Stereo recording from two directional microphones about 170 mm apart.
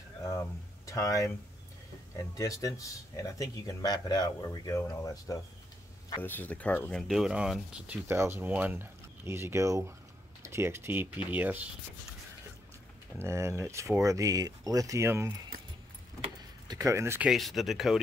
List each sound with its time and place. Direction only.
0.2 s a sound: 15° left (ahead or behind)
2.1 s speech: 20° left (ahead or behind); by 11.7 s 10° right (ahead or behind)
13.2 s speech: 15° right (ahead or behind)
16.6 s speech: 20° right (ahead or behind)
17.3 s speech: centre (ahead or behind)